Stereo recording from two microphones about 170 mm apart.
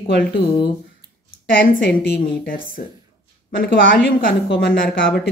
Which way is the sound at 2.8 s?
50° left (ahead or behind).